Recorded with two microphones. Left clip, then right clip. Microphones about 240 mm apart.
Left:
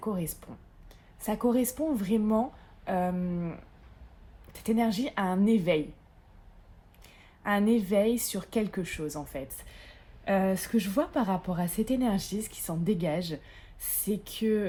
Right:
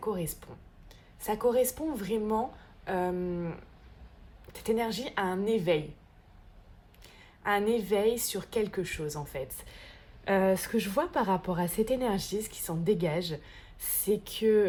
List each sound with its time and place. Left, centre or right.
0.0 s speech: right
7.0 s a woman's voice: right